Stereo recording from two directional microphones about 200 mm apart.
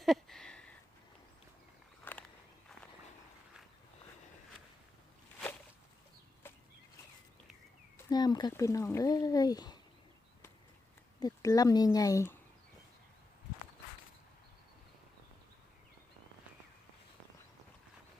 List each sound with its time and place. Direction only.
0.0 s a sound: centre (ahead or behind)
2.1 s walk: 10° left (ahead or behind)
7.9 s speech: 20° left (ahead or behind)
11.2 s speech: 20° left (ahead or behind)